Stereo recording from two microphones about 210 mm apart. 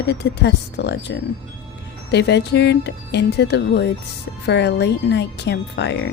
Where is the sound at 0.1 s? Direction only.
55° left (ahead or behind).